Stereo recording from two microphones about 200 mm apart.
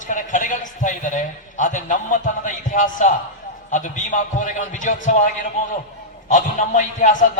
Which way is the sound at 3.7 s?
40° left (ahead or behind).